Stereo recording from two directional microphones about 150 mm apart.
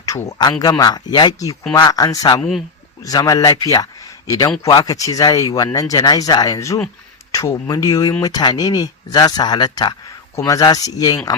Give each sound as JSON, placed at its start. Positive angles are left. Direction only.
{"t": 0.0, "sound": "a man's voice", "side_deg": 20}
{"t": 2.4, "sound": "speech", "side_deg": 0}
{"t": 3.0, "sound": "speech", "side_deg": 25}